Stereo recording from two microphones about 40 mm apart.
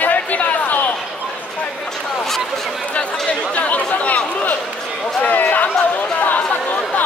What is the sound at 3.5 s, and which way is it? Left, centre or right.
Chatter, left.